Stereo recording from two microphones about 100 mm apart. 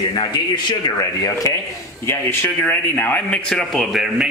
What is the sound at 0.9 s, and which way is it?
Speech, 35° left (ahead or behind).